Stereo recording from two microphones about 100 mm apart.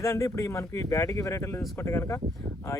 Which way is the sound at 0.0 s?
30° left (ahead or behind).